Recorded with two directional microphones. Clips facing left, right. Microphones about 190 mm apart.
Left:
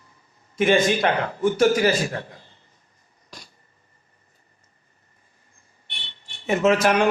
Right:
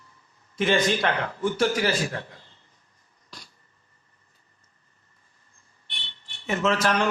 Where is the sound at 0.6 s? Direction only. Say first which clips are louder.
Left 4 dB; 15° left (ahead or behind).